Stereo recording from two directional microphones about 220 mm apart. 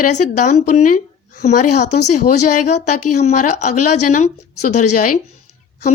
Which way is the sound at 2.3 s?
90° left.